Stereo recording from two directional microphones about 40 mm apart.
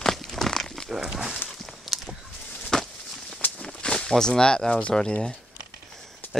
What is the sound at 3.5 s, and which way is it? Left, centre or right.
Walk, left.